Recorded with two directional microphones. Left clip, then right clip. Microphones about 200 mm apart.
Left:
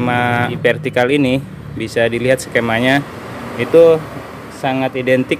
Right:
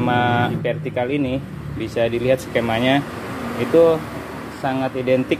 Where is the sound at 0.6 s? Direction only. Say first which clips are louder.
Left 8 dB; 35° left (ahead or behind).